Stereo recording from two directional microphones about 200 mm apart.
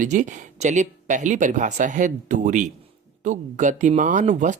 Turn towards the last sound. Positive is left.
turn(degrees=-40)  # may be behind; listen again after turning